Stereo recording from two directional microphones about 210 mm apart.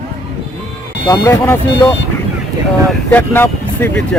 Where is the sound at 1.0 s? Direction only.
15° left (ahead or behind).